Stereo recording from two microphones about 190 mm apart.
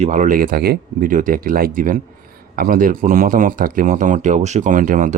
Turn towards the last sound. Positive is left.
turn(degrees=-45)  # may be behind; listen again after turning